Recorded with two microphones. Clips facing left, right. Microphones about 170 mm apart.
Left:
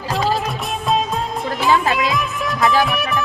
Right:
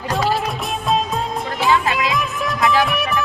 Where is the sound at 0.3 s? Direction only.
Centre (ahead or behind).